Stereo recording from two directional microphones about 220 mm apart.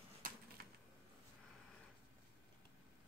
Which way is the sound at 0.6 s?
45° right (ahead or behind).